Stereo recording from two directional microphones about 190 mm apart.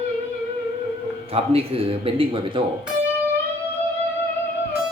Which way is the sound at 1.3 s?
30° right (ahead or behind).